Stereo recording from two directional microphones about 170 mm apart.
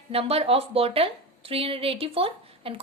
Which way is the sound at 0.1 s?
35° right (ahead or behind).